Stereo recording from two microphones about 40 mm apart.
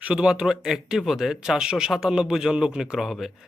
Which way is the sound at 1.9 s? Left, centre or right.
Centre.